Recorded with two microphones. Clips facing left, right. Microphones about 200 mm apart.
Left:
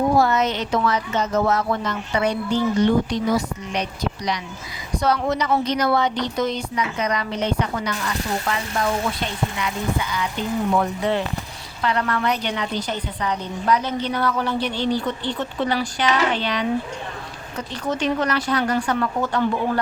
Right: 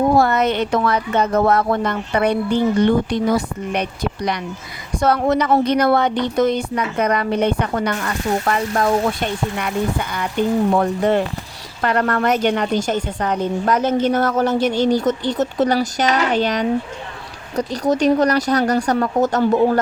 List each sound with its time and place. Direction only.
0.2 s a woman's voice: 55° right (ahead or behind)